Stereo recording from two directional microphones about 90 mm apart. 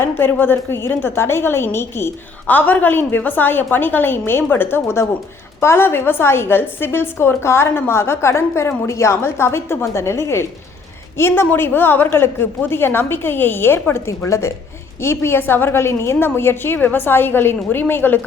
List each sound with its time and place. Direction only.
0.2 s a woman's voice: 25° left (ahead or behind)